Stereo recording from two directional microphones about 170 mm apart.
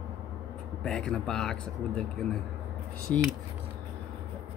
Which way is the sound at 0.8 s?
5° left (ahead or behind).